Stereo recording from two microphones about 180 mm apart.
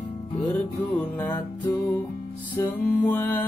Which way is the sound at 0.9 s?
10° left (ahead or behind).